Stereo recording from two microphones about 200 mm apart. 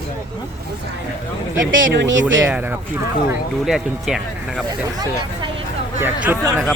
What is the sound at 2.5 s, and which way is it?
Speech, 10° right (ahead or behind).